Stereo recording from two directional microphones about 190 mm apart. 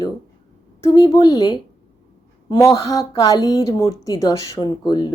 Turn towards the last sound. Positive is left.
turn(degrees=20)  # may be behind; listen again after turning